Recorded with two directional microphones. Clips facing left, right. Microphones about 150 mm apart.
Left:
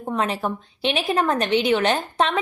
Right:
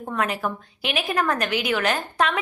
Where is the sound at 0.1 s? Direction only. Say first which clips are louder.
Left 2 dB; 25° left (ahead or behind).